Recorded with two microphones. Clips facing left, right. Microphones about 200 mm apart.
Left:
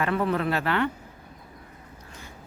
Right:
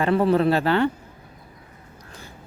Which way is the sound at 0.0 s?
30° right (ahead or behind).